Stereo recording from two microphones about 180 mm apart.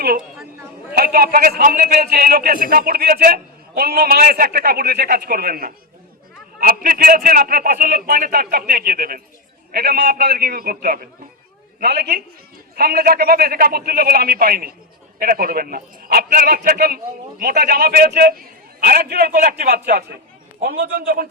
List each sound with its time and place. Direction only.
0.9 s a man's voice: 60° right (ahead or behind)